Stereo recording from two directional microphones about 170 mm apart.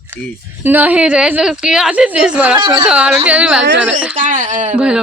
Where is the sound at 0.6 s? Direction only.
10° right (ahead or behind).